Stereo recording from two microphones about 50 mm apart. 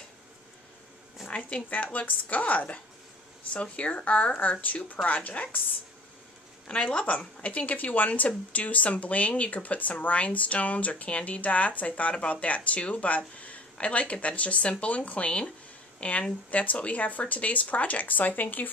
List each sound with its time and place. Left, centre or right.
1.2 s a sound: left
1.7 s speech: left
6.7 s speech: centre; by 18.7 s left